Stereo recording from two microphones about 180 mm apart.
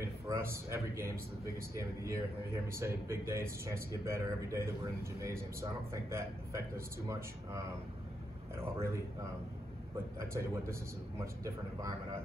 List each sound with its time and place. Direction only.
0.0 s a man's voice: 15° right (ahead or behind)
10.3 s speech: 15° right (ahead or behind)